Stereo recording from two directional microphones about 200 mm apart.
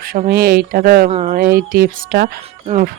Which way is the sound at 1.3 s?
45° right (ahead or behind).